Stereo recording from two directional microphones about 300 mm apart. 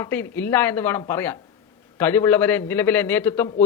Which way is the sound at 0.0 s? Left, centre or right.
Centre.